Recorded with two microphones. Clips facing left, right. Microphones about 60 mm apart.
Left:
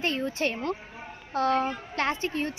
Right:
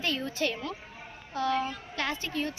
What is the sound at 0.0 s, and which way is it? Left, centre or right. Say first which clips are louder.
Speech: left 3 dB; left.